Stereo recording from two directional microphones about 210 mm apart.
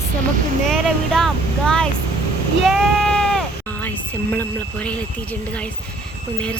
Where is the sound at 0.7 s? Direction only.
Centre (ahead or behind).